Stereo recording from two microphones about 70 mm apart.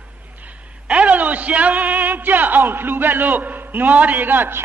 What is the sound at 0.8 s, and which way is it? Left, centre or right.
A man's voice, centre.